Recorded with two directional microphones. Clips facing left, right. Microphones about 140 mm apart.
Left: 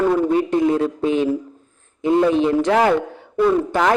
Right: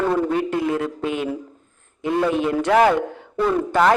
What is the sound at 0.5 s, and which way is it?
Speech, 25° left (ahead or behind).